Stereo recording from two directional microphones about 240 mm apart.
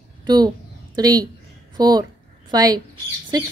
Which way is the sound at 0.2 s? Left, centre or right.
Centre.